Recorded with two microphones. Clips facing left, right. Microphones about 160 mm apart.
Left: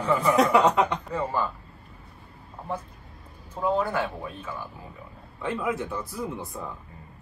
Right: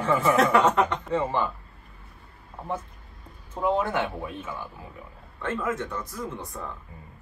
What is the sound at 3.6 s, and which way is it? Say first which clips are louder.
Speech: even; 20° right (ahead or behind).